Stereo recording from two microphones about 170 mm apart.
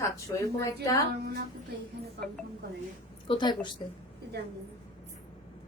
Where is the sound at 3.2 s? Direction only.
30° left (ahead or behind).